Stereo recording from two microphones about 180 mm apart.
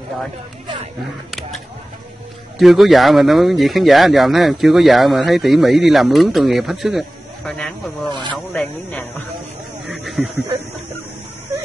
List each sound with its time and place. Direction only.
2.6 s speech: centre (ahead or behind)
8.1 s speech: 25° right (ahead or behind)
8.5 s speech: 5° left (ahead or behind)
9.8 s a sound: centre (ahead or behind)